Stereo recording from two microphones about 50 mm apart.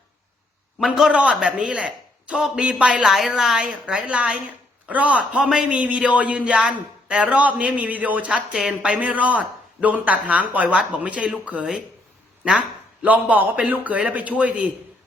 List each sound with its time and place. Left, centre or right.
1.1 s speech: right
3.1 s a woman's voice: centre
5.5 s speech: centre